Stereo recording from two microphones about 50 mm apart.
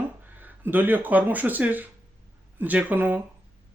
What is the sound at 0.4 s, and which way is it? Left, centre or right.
Speech, right.